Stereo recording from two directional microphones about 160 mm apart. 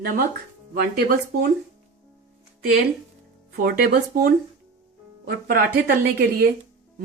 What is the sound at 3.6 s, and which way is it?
Speech, 65° right (ahead or behind).